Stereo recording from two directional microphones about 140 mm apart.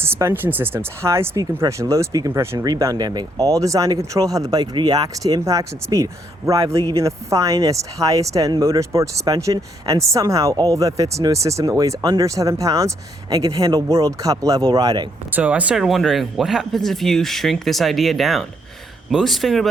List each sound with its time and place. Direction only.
0.0 s speech: 20° right (ahead or behind)
15.3 s speech: 10° right (ahead or behind)